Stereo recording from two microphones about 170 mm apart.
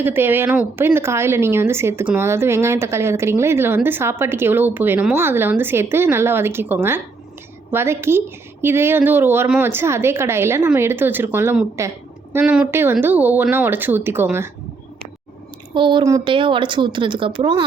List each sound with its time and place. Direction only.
0.0 s a woman's voice: 10° right (ahead or behind)
15.7 s a woman's voice: 30° right (ahead or behind)